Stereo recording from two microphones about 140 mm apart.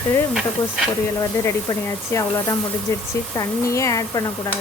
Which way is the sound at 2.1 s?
20° left (ahead or behind).